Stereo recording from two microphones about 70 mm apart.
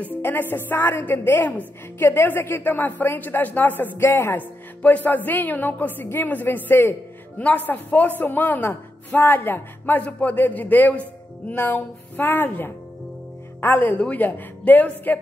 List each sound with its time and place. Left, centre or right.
0.0 s a woman's voice: left
4.4 s a woman's voice: left